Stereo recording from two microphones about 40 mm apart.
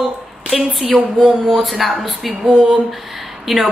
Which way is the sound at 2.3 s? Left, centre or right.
Right.